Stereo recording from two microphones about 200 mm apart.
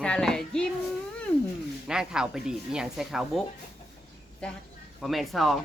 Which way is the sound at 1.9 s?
5° right (ahead or behind).